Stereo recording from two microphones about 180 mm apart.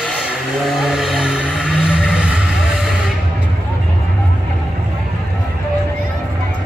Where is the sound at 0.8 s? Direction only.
Centre (ahead or behind).